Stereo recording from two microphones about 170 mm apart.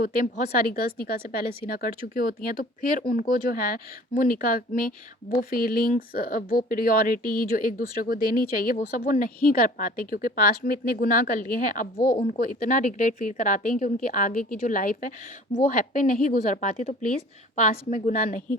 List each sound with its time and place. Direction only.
0.0 s speech: 50° left (ahead or behind)
2.1 s speech: 50° left (ahead or behind)